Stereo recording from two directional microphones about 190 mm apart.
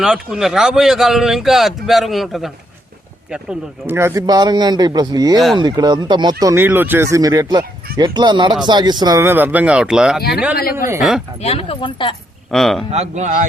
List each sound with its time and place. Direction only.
0.0 s speech: centre (ahead or behind)
3.8 s speech: 15° right (ahead or behind)
10.6 s speech: 50° left (ahead or behind)
11.3 s speech: 35° left (ahead or behind)
12.5 s speech: centre (ahead or behind)
12.9 s speech: 35° right (ahead or behind)